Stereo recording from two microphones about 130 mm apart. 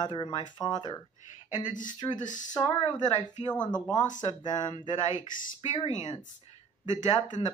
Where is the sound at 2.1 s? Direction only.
75° left (ahead or behind).